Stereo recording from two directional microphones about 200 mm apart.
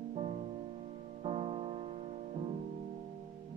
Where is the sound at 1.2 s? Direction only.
30° right (ahead or behind).